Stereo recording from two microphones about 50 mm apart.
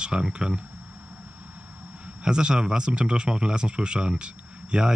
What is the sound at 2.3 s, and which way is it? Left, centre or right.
Speech, centre.